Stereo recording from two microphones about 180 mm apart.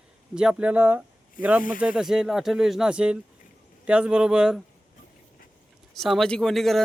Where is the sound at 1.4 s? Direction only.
50° left (ahead or behind).